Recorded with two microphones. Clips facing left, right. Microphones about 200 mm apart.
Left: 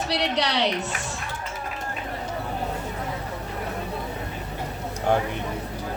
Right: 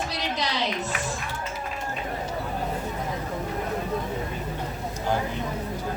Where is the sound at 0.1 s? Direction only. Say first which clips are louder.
Left 5 dB; 70° left (ahead or behind).